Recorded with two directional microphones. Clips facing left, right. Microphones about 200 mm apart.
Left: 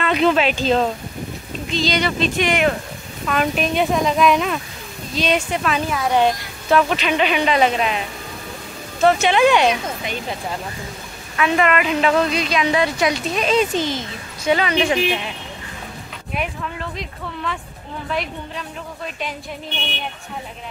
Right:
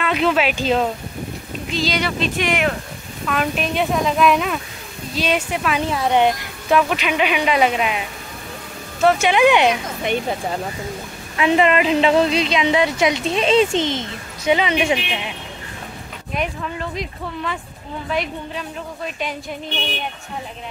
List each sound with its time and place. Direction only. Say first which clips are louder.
0.0 s speech: left 2 dB; 5° right (ahead or behind)
5.8 s a woman's voice: right 2 dB; 25° right (ahead or behind)
6.8 s speech: left 1 dB; 5° right (ahead or behind)
9.0 s speech: even; 10° right (ahead or behind)
11.3 s a woman's voice: right 2 dB; 25° right (ahead or behind)
14.8 s speech: left 2 dB; 10° right (ahead or behind)
16.9 s speech: right 3 dB; centre (ahead or behind)